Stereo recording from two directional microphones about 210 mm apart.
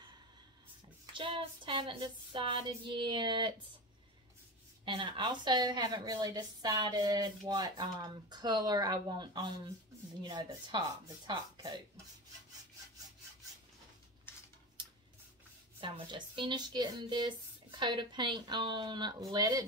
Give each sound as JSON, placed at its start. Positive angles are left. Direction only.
{"t": 1.1, "sound": "speech", "side_deg": -25}
{"t": 4.8, "sound": "speech", "side_deg": -25}
{"t": 15.8, "sound": "speech", "side_deg": -20}